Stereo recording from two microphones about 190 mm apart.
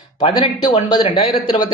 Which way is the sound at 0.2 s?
25° left (ahead or behind).